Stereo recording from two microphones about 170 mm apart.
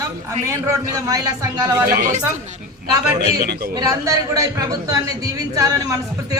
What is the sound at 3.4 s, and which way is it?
Speech, 70° right (ahead or behind).